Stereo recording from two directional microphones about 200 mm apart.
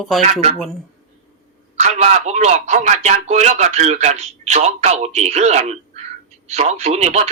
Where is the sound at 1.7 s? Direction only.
35° right (ahead or behind).